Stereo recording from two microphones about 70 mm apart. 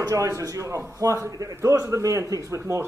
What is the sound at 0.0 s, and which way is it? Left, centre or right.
A man's voice, right.